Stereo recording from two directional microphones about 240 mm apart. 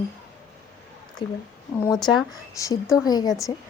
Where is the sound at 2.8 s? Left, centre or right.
Centre.